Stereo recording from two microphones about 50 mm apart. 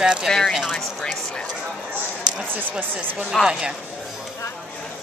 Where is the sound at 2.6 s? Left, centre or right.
Right.